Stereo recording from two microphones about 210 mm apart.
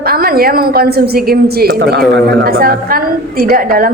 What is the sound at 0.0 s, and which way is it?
A woman's voice, 45° right (ahead or behind).